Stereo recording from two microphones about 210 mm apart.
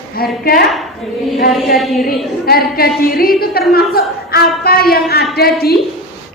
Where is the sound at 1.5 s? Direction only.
Centre (ahead or behind).